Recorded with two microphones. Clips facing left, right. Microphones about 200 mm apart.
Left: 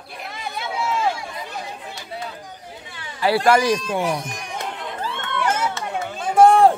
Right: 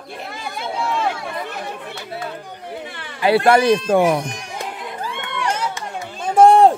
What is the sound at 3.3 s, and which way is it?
Speech, 60° right (ahead or behind).